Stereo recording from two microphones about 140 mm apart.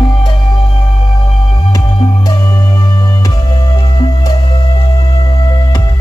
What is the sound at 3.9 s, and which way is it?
Music, 25° left (ahead or behind).